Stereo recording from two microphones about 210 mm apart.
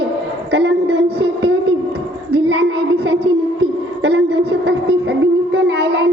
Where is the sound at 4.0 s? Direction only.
50° right (ahead or behind).